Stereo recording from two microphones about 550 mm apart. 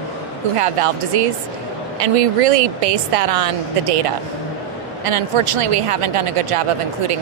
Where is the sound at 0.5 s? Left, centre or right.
Right.